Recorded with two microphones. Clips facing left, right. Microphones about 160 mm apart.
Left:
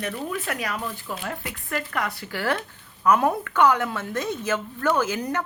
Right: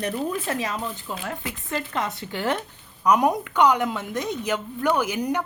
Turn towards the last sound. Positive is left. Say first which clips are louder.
# right 1 dB
turn(degrees=-15)  # may be behind; listen again after turning